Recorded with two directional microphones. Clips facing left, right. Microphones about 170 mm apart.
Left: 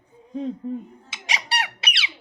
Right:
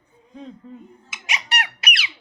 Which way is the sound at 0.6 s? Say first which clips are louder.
Left 11 dB; 20° left (ahead or behind).